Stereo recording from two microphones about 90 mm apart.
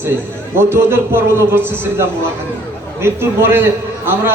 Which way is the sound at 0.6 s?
25° right (ahead or behind).